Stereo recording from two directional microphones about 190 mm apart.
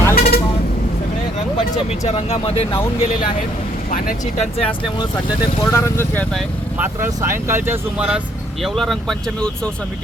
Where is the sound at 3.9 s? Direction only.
40° left (ahead or behind).